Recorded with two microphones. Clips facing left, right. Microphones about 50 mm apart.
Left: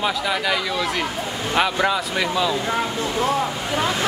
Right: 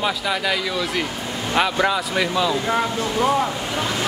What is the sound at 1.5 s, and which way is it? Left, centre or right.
Speech, centre.